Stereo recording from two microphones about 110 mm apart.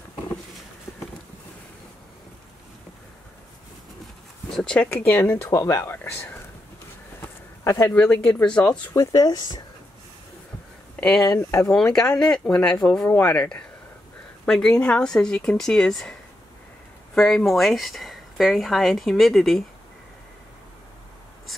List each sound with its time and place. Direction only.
4.5 s speech: 5° left (ahead or behind)
7.9 s speech: 10° left (ahead or behind)
8.9 s speech: 35° left (ahead or behind)
11.0 s speech: 5° left (ahead or behind)
11.2 s speech: 25° left (ahead or behind)
11.6 s speech: 5° left (ahead or behind)